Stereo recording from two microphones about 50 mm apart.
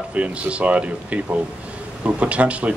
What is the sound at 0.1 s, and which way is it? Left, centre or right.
Speech, right.